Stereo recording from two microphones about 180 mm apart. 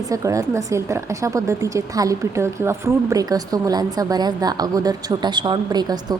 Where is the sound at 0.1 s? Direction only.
15° right (ahead or behind).